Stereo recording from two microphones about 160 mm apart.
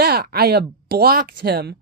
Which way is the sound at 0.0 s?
75° right (ahead or behind).